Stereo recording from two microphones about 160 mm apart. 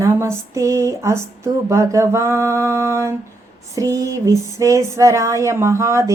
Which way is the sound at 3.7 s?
20° right (ahead or behind).